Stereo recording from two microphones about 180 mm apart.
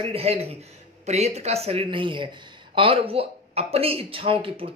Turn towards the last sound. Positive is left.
turn(degrees=-30)  # may be behind; listen again after turning